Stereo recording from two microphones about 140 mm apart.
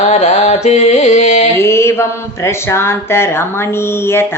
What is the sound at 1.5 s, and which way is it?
Mantra, 20° left (ahead or behind).